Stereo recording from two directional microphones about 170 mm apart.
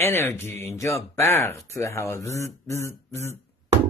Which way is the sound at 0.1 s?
15° left (ahead or behind).